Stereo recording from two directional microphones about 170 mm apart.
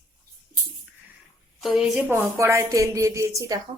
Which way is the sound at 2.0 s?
15° right (ahead or behind).